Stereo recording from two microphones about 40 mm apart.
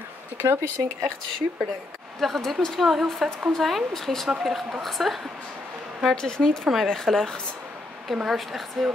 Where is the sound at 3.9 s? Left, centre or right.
Centre.